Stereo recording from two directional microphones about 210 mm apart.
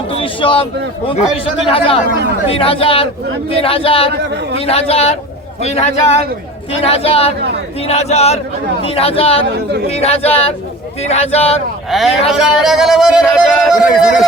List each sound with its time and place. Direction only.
0.1 s a man's voice: 25° left (ahead or behind)
11.9 s speech: centre (ahead or behind)